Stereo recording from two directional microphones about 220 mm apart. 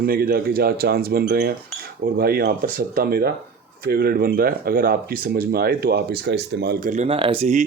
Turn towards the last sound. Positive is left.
turn(degrees=-30)  # may be behind; listen again after turning